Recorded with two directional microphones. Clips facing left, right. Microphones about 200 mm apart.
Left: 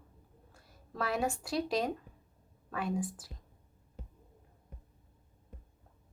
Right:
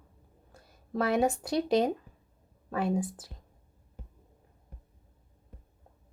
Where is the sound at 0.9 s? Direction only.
20° right (ahead or behind).